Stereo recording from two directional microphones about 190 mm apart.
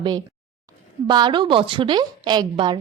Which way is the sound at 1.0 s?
25° right (ahead or behind).